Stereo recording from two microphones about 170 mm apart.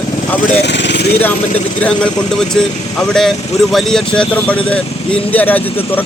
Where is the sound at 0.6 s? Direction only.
90° left.